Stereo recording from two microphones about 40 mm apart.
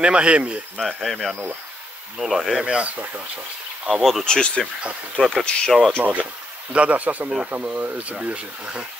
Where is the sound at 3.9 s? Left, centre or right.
Centre.